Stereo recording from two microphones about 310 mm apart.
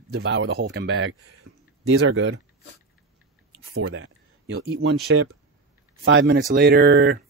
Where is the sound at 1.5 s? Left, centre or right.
Right.